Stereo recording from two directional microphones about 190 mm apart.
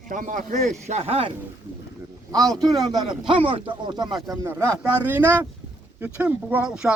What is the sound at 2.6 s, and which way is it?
Speech, 20° right (ahead or behind).